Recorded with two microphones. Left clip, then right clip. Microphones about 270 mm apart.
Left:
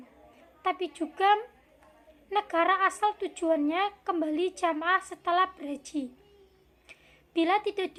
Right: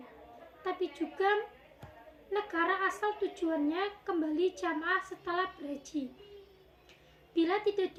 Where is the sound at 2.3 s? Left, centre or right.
Centre.